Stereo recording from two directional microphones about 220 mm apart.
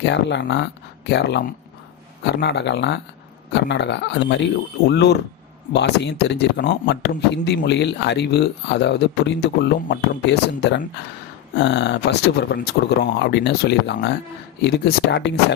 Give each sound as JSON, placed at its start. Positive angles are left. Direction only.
{"t": 0.0, "sound": "speech", "side_deg": 55}